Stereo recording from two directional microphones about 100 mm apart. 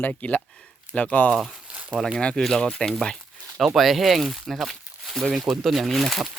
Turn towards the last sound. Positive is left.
turn(degrees=0)  # may be behind; listen again after turning